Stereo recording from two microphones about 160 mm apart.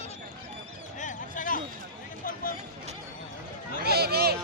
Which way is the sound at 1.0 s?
55° left (ahead or behind).